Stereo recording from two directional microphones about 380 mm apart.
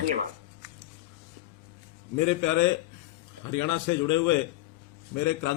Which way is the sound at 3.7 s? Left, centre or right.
Left.